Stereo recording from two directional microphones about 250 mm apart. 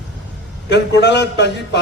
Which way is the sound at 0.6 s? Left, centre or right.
Left.